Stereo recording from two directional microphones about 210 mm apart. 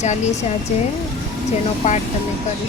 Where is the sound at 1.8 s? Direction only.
35° left (ahead or behind).